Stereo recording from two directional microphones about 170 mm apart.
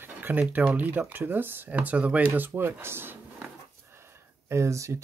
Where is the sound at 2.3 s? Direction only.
10° right (ahead or behind).